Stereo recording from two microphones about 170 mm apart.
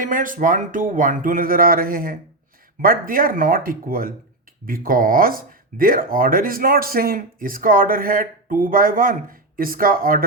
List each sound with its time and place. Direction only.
0.0 s speech: 50° right (ahead or behind)